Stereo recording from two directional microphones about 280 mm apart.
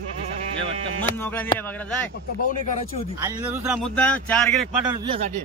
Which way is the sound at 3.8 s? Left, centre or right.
Centre.